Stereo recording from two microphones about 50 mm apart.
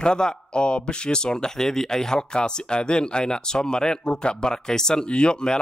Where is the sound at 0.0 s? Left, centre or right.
Centre.